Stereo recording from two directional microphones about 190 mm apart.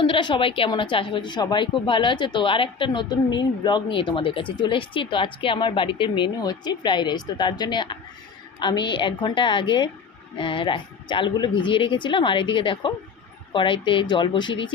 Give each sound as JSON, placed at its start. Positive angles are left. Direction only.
{"t": 0.0, "sound": "a woman's voice", "side_deg": 25}